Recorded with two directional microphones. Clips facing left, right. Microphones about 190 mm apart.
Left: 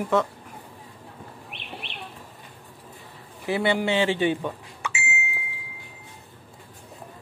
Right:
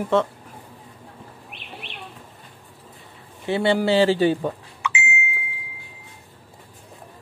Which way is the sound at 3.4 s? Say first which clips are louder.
Right 4 dB; 30° right (ahead or behind).